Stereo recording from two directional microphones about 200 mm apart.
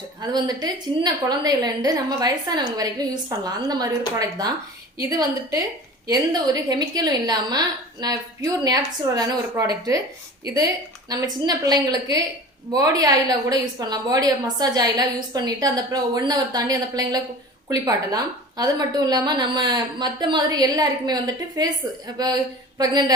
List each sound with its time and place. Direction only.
0.2 s a woman's voice: 20° right (ahead or behind)
11.1 s a woman's voice: 20° right (ahead or behind)